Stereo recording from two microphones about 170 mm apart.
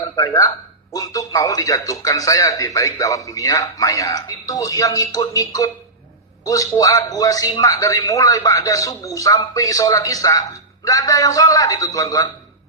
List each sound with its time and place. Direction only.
0.1 s a man's voice: 20° left (ahead or behind)